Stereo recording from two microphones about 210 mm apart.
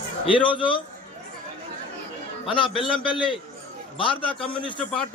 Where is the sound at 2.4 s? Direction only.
25° left (ahead or behind).